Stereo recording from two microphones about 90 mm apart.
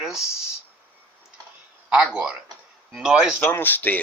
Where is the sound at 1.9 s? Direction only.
10° right (ahead or behind).